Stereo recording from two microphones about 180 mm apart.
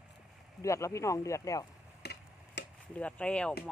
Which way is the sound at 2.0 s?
65° left (ahead or behind).